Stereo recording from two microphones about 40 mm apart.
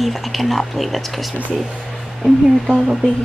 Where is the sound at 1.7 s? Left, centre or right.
Centre.